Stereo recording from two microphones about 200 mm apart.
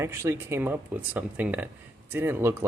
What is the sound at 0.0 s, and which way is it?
Speech, 10° right (ahead or behind).